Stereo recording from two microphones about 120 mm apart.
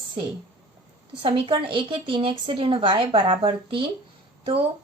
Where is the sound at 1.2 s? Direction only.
50° right (ahead or behind).